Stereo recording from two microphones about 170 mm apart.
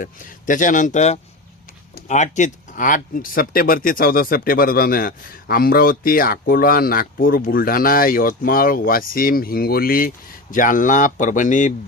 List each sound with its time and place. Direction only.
0.0 s a man's voice: 50° left (ahead or behind)